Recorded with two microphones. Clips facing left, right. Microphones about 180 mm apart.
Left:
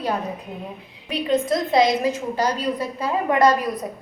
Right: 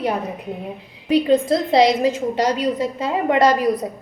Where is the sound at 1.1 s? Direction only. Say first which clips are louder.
Right 5 dB; 30° right (ahead or behind).